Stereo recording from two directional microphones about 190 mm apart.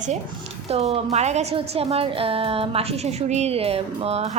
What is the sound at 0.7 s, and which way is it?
A woman's voice, 35° right (ahead or behind).